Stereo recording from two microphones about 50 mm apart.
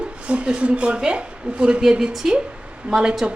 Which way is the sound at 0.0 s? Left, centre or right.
Right.